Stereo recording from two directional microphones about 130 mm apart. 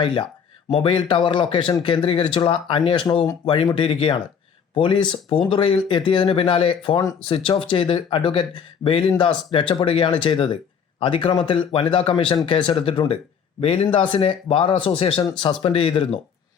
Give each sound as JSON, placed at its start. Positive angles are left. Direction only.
{"t": 0.0, "sound": "speech", "side_deg": 40}